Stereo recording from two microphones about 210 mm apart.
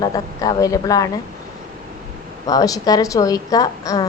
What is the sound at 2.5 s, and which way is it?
Speech, 15° left (ahead or behind).